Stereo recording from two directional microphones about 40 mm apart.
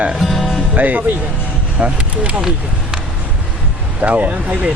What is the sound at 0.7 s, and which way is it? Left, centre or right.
Music, right.